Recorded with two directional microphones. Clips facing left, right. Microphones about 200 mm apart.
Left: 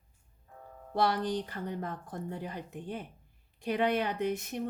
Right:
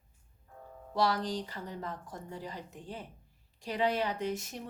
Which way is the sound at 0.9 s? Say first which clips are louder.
Left 1 dB; 55° left (ahead or behind).